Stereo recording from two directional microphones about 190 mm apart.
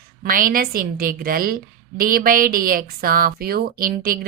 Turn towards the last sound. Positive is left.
turn(degrees=-50)  # may be behind; listen again after turning